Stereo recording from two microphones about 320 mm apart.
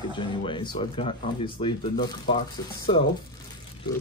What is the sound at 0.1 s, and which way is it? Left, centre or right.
Speech, centre.